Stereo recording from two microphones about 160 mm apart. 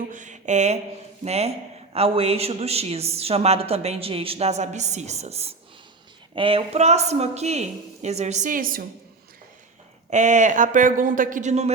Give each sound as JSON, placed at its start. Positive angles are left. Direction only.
{"t": 0.1, "sound": "a sound", "side_deg": -50}
{"t": 1.2, "sound": "a woman's voice", "side_deg": -40}
{"t": 10.1, "sound": "a woman's voice", "side_deg": -50}